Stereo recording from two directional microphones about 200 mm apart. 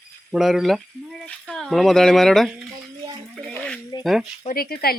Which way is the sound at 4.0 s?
Centre (ahead or behind).